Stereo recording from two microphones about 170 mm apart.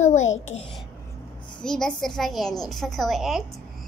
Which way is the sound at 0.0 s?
40° left (ahead or behind).